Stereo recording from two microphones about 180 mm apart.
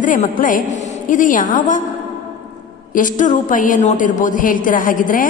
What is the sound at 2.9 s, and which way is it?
A woman's voice, 45° left (ahead or behind).